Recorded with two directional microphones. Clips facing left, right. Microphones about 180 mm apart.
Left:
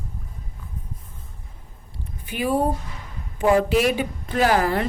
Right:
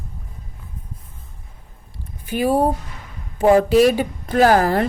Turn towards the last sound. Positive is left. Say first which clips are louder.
# right 5 dB
turn(degrees=-45)  # may be behind; listen again after turning